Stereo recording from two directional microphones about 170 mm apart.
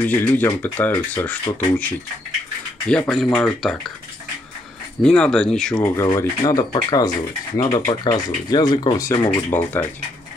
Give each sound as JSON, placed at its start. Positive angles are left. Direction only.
{"t": 0.0, "sound": "speech", "side_deg": 10}
{"t": 5.0, "sound": "speech", "side_deg": 5}
{"t": 5.8, "sound": "speech", "side_deg": 15}
{"t": 7.8, "sound": "speech", "side_deg": 30}